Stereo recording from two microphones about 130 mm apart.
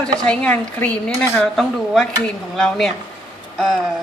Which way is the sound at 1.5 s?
Centre (ahead or behind).